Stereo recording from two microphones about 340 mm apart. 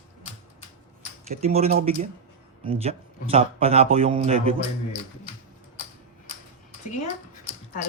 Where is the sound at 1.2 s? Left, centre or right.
Centre.